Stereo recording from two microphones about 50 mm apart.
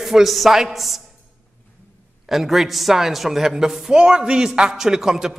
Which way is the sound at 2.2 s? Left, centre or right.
Centre.